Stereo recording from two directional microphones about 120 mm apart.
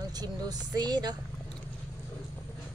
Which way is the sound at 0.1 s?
35° right (ahead or behind).